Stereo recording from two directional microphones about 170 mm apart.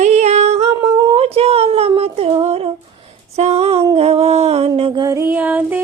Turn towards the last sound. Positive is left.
turn(degrees=-10)  # may be behind; listen again after turning